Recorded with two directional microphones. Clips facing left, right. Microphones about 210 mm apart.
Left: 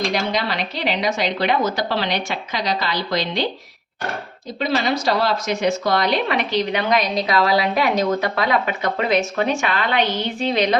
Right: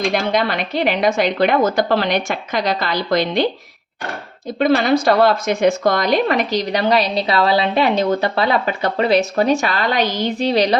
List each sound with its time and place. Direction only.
0.1 s a woman's voice: 55° right (ahead or behind)
4.6 s speech: 55° right (ahead or behind); by 10.8 s 35° right (ahead or behind)